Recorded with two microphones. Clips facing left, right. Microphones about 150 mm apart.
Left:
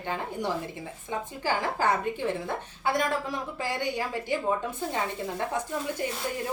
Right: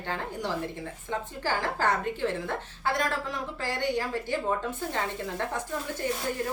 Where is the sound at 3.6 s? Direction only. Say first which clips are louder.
Right 2 dB; 15° left (ahead or behind).